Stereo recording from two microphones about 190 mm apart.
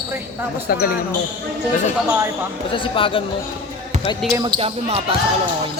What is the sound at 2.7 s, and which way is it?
Speech, 25° left (ahead or behind).